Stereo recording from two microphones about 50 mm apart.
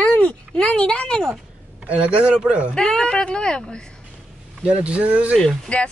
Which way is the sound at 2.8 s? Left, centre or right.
Centre.